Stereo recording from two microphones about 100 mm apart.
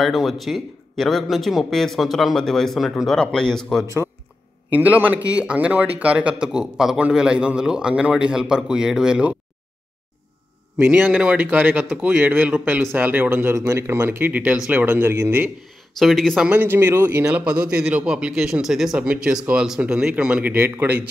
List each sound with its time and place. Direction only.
0.0 s a man's voice: centre (ahead or behind)
3.8 s speech: 25° right (ahead or behind)
4.7 s speech: 15° right (ahead or behind)
10.8 s speech: 15° right (ahead or behind)
16.0 s a man's voice: centre (ahead or behind)
16.4 s speech: 20° right (ahead or behind)
17.3 s speech: 10° right (ahead or behind)